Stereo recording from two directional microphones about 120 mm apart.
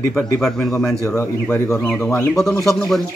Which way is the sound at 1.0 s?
25° left (ahead or behind).